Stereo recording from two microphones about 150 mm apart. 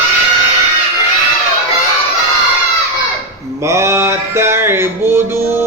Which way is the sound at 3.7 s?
20° right (ahead or behind).